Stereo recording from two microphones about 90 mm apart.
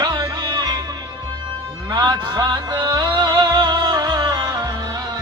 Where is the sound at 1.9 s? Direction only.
50° right (ahead or behind).